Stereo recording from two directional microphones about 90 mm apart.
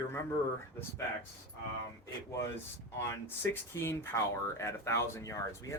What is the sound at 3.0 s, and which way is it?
Speech, 30° left (ahead or behind).